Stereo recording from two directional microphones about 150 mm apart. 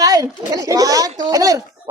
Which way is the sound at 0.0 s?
25° right (ahead or behind).